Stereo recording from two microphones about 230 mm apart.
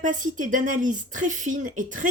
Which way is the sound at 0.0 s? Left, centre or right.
Right.